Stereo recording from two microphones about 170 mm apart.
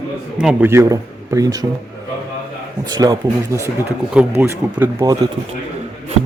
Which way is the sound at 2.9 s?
25° right (ahead or behind).